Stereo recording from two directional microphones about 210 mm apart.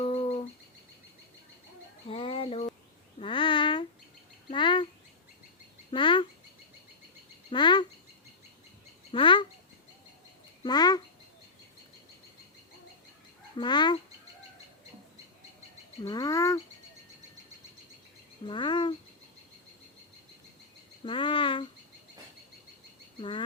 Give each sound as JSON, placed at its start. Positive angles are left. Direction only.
{"t": 0.0, "sound": "bird", "side_deg": 30}
{"t": 2.0, "sound": "bird", "side_deg": 25}
{"t": 3.2, "sound": "a sound", "side_deg": 25}
{"t": 4.5, "sound": "bird", "side_deg": 25}
{"t": 5.9, "sound": "duck", "side_deg": 25}
{"t": 7.5, "sound": "bird", "side_deg": 20}
{"t": 9.1, "sound": "bird", "side_deg": 25}
{"t": 10.6, "sound": "bird", "side_deg": 20}
{"t": 13.6, "sound": "bird", "side_deg": 20}
{"t": 16.0, "sound": "bird", "side_deg": 20}
{"t": 18.4, "sound": "bird", "side_deg": 20}
{"t": 21.0, "sound": "cricket", "side_deg": 25}